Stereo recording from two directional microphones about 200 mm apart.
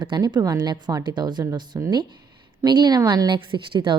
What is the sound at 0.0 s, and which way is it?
A woman's voice, 20° right (ahead or behind).